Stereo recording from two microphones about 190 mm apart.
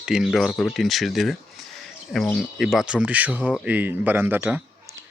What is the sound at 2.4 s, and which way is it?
Speech, centre (ahead or behind).